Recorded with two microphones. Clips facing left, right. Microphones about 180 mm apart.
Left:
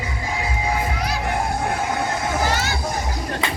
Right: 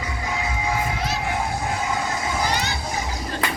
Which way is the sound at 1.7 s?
60° left (ahead or behind).